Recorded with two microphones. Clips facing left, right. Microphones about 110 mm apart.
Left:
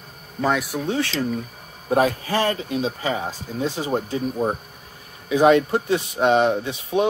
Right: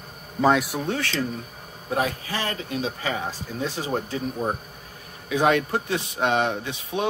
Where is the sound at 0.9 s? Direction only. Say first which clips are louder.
Left 5 dB; 25° left (ahead or behind).